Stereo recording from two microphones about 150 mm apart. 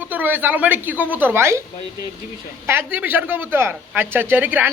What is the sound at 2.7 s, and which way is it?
Speech, 15° right (ahead or behind).